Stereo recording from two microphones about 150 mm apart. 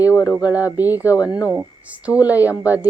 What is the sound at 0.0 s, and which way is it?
Speech, 20° left (ahead or behind).